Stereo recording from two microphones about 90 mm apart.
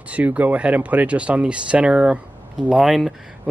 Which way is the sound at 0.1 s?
15° right (ahead or behind).